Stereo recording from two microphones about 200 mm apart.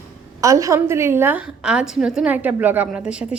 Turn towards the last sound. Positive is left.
turn(degrees=-5)  # may be behind; listen again after turning